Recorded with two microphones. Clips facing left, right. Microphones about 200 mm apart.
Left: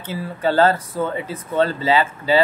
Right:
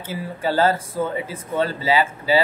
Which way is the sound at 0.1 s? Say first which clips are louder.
Left 3 dB; 10° right (ahead or behind).